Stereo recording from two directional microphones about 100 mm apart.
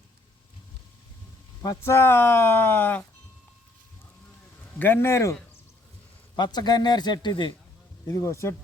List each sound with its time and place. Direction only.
1.8 s speech: 25° left (ahead or behind)
4.8 s speech: 25° left (ahead or behind)
6.3 s a man's voice: 45° left (ahead or behind)
8.0 s speech: 35° left (ahead or behind)